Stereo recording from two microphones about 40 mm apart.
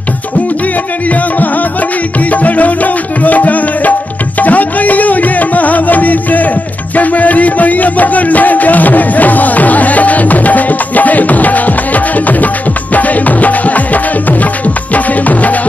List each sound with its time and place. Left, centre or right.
2.1 s music: left